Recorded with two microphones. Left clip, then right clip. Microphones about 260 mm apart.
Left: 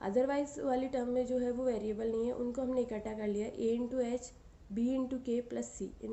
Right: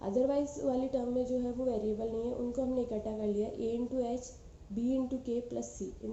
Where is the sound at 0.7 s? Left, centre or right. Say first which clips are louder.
Even; left.